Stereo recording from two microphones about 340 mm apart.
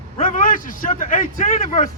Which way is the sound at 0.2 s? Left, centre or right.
Left.